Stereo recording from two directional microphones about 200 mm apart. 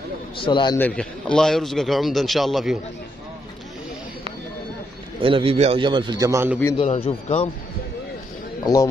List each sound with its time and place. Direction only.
0.4 s speech: 25° left (ahead or behind)
0.7 s a man's voice: 5° left (ahead or behind)
5.2 s a man's voice: 25° right (ahead or behind)
6.8 s speech: 30° left (ahead or behind)